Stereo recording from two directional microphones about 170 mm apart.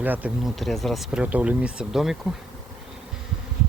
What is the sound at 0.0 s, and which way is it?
Speech, 10° right (ahead or behind).